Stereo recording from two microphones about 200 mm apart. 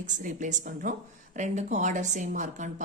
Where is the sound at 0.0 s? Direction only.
40° right (ahead or behind).